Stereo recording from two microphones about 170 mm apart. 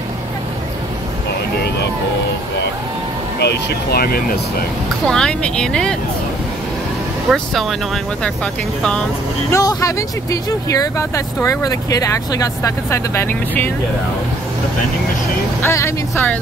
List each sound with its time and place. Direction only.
3.3 s speech: 75° left (ahead or behind)
5.0 s speech: 5° left (ahead or behind)
7.2 s speech: centre (ahead or behind)
9.5 s speech: 20° left (ahead or behind)
15.6 s speech: 15° left (ahead or behind)